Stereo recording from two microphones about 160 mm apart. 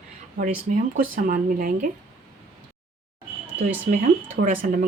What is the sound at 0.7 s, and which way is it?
A woman's voice, 60° right (ahead or behind).